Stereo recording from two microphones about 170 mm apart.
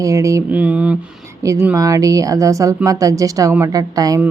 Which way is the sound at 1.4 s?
20° right (ahead or behind).